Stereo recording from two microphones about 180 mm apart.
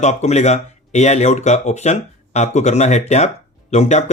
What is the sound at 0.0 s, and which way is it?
Speech, 40° left (ahead or behind).